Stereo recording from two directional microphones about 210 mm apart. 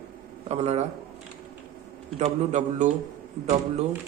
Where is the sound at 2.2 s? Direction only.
35° right (ahead or behind).